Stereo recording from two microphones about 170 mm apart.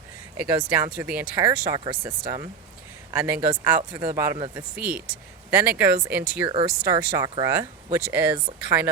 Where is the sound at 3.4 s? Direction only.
10° right (ahead or behind).